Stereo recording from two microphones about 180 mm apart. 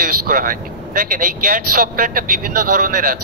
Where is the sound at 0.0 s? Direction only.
55° right (ahead or behind).